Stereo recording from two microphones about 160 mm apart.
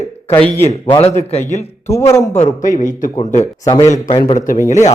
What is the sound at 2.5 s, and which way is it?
Speech, 50° left (ahead or behind).